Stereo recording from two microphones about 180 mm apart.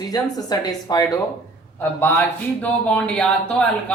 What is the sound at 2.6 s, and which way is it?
Speech, 10° left (ahead or behind).